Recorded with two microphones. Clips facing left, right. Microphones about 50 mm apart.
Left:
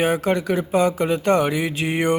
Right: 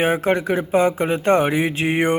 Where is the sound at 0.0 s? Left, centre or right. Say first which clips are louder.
Right 1 dB; right.